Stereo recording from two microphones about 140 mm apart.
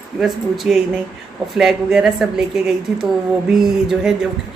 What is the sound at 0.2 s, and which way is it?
A woman's voice, centre (ahead or behind).